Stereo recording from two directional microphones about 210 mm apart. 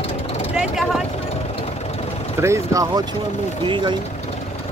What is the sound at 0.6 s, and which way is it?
Speech, centre (ahead or behind).